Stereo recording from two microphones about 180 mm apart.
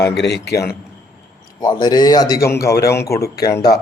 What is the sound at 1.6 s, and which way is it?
Speech, 25° left (ahead or behind).